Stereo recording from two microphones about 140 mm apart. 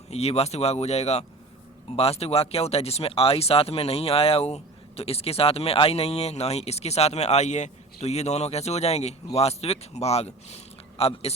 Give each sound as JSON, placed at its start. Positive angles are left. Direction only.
{"t": 0.1, "sound": "speech", "side_deg": 50}